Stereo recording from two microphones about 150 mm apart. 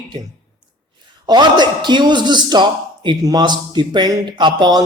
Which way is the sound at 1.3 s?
30° right (ahead or behind).